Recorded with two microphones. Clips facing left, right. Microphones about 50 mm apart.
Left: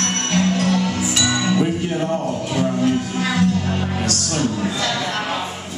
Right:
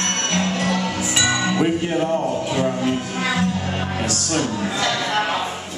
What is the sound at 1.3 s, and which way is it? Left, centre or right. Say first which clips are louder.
Music: even; centre.